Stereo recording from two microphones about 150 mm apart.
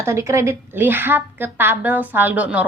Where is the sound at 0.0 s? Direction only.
20° right (ahead or behind).